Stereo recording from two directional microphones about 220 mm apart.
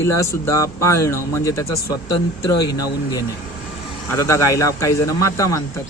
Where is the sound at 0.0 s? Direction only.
10° left (ahead or behind).